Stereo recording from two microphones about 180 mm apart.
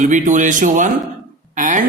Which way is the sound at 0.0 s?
45° right (ahead or behind).